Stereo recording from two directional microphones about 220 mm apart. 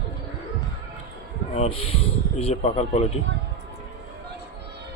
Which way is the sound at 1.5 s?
25° left (ahead or behind).